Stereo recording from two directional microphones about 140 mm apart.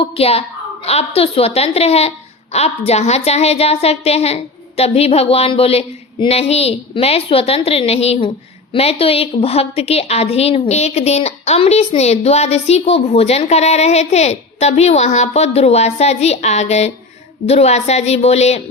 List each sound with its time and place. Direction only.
0.0 s a woman's voice: 45° left (ahead or behind)